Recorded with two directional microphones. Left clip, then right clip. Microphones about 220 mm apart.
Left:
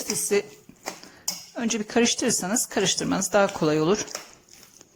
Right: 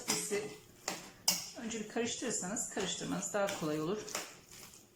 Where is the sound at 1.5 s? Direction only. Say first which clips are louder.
Left 14 dB; 45° left (ahead or behind).